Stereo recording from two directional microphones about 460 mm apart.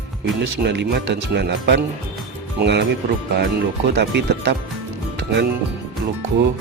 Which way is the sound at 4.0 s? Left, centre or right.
Right.